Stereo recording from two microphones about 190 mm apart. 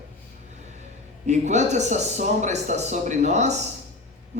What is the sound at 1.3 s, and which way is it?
Speech, 40° right (ahead or behind).